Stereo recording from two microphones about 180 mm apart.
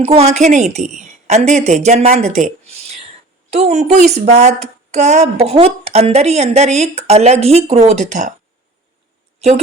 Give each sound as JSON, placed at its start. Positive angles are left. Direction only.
{"t": 0.0, "sound": "speech", "side_deg": -35}